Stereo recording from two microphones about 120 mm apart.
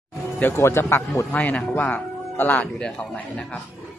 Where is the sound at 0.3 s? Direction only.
20° left (ahead or behind).